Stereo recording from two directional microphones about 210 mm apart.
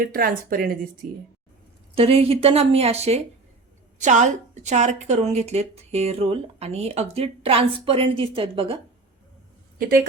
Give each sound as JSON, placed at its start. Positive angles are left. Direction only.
{"t": 0.0, "sound": "speech", "side_deg": -45}
{"t": 2.0, "sound": "a woman's voice", "side_deg": -25}
{"t": 9.7, "sound": "a woman's voice", "side_deg": -45}